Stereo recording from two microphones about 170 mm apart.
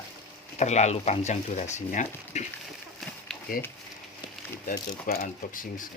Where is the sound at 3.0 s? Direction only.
Centre (ahead or behind).